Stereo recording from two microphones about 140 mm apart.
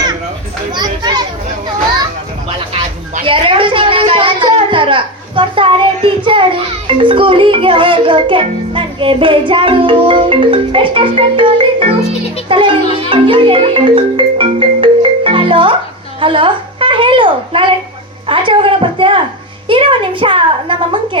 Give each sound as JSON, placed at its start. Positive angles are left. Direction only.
{"t": 3.2, "sound": "a sound", "side_deg": -40}
{"t": 4.5, "sound": "a child's voice", "side_deg": -35}
{"t": 12.5, "sound": "marimba", "side_deg": -40}
{"t": 16.2, "sound": "a woman's voice", "side_deg": -40}